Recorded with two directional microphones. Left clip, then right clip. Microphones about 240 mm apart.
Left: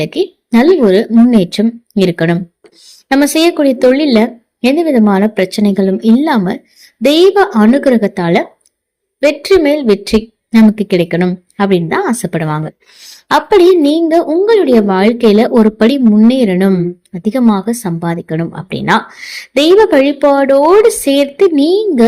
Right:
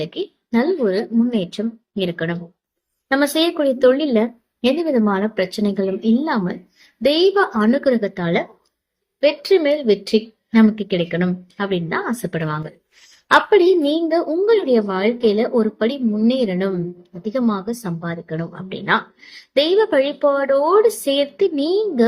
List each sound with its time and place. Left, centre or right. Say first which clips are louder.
0.0 s speech: left 11 dB; left